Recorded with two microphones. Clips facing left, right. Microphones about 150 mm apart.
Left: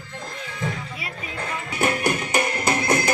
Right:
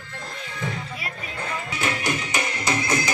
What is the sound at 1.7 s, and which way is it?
Music, 50° left (ahead or behind).